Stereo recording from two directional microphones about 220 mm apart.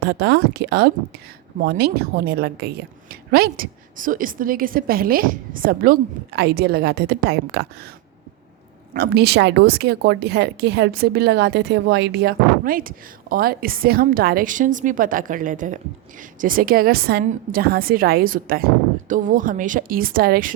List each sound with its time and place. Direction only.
0.0 s a woman's voice: 50° right (ahead or behind)
8.9 s a woman's voice: 45° right (ahead or behind)